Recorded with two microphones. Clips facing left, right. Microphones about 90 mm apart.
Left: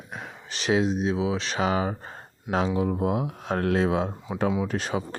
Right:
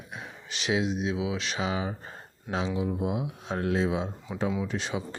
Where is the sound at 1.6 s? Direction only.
50° left (ahead or behind).